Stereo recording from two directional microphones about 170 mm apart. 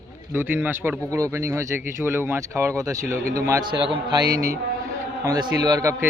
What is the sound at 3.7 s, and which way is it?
Speech, 30° right (ahead or behind).